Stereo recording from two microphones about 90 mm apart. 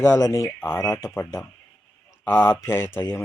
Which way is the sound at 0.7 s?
35° left (ahead or behind).